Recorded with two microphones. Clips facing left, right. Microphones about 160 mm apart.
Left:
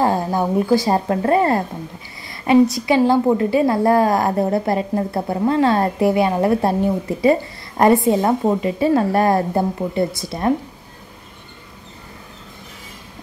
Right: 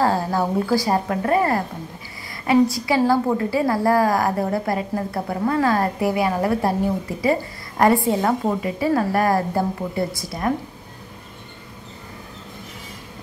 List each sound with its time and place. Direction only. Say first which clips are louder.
0.0 s a woman's voice: left 2 dB; 20° left (ahead or behind)